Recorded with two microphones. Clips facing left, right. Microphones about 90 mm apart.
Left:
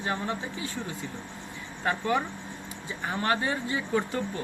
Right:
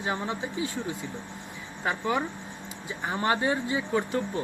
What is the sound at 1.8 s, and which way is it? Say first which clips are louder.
Speech: left 1 dB; 5° right (ahead or behind).